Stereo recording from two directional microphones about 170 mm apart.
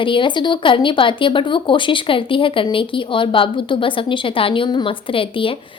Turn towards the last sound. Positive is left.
turn(degrees=30)  # may be behind; listen again after turning